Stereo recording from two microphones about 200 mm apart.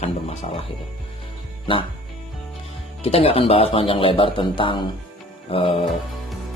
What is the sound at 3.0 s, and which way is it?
Speech, 30° left (ahead or behind).